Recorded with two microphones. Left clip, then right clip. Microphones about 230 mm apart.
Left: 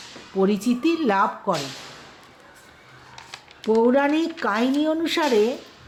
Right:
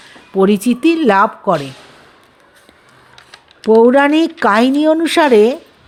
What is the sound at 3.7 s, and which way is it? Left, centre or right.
Speech, right.